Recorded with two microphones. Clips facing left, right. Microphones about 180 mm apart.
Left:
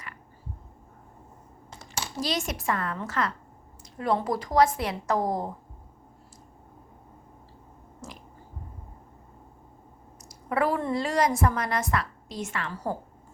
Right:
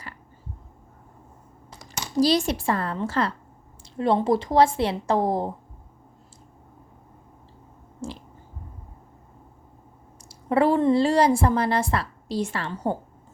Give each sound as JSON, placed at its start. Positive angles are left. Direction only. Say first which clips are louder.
{"t": 2.2, "sound": "a woman's voice", "louder": "right 8 dB", "side_deg": -35}
{"t": 8.0, "sound": "a sound", "louder": "right 9 dB", "side_deg": -30}
{"t": 10.2, "sound": "a woman's voice", "louder": "right 6 dB", "side_deg": -30}